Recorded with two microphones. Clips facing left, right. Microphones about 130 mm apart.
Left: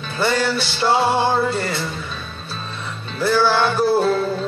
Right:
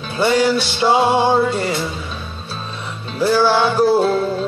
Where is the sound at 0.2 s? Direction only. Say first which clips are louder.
Right 5 dB; 15° right (ahead or behind).